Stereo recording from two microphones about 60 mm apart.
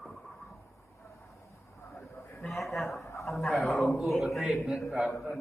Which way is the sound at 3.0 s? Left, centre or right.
Left.